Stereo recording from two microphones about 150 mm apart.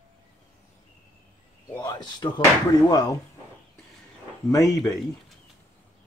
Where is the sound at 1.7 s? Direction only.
25° left (ahead or behind).